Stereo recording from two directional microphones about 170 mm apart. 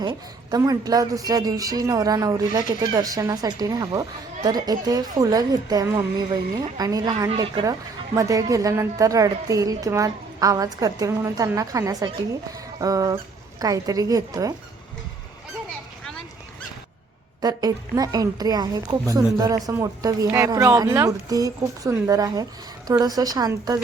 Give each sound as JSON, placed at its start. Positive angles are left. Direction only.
{"t": 0.0, "sound": "a woman's voice", "side_deg": -25}
{"t": 17.4, "sound": "a woman's voice", "side_deg": -20}